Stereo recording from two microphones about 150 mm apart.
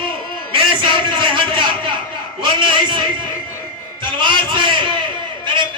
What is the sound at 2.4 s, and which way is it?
A man's voice, 35° right (ahead or behind).